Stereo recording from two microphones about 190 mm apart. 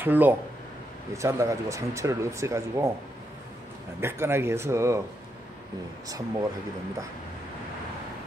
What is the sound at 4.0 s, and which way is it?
Speech, 15° right (ahead or behind).